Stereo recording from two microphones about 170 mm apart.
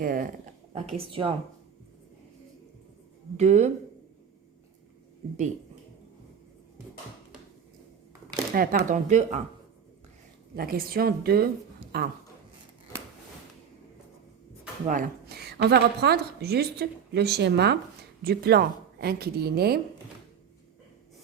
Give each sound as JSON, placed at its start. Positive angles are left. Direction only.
{"t": 0.0, "sound": "a woman's voice", "side_deg": -55}
{"t": 0.9, "sound": "speech", "side_deg": -35}
{"t": 3.3, "sound": "speech", "side_deg": -40}
{"t": 8.5, "sound": "speech", "side_deg": -60}
{"t": 10.5, "sound": "a woman's voice", "side_deg": -60}
{"t": 14.8, "sound": "a woman's voice", "side_deg": -55}